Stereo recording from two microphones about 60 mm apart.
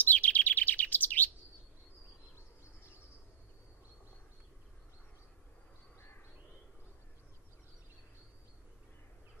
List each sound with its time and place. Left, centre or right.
0.0 s chirp: left
5.9 s crow: left